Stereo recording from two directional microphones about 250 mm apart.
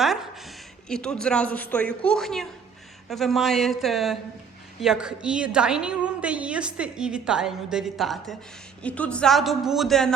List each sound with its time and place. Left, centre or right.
0.0 s a woman's voice: centre